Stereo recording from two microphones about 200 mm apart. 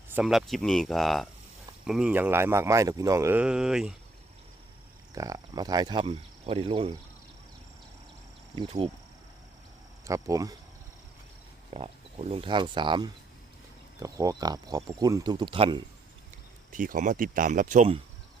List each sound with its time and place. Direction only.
0.1 s speech: 5° right (ahead or behind)
5.1 s speech: 15° right (ahead or behind)
8.5 s speech: 30° right (ahead or behind)
10.0 s speech: 15° right (ahead or behind)
11.7 s speech: 30° right (ahead or behind)
16.7 s speech: 40° right (ahead or behind)